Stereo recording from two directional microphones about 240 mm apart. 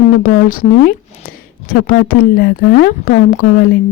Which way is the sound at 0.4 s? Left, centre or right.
Left.